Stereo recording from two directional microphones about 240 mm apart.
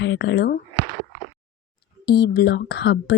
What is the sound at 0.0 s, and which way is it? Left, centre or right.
Speech, left.